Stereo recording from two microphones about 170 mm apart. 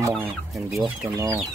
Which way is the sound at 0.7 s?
15° right (ahead or behind).